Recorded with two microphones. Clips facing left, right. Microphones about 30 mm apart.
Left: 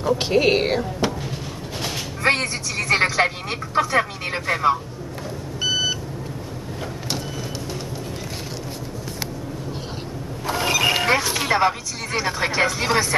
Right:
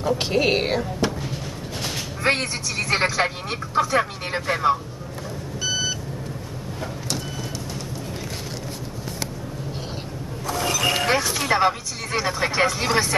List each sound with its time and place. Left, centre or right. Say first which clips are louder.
0.0 s speech: left 2 dB; centre
1.8 s a sound: left 1 dB; centre
3.0 s speech: left 3 dB; centre
10.4 s vehicle: left 3 dB; left
11.2 s a sound: left 1 dB; centre
11.5 s speech: even; centre